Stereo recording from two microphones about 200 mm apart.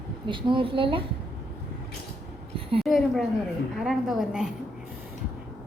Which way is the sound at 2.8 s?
Centre (ahead or behind).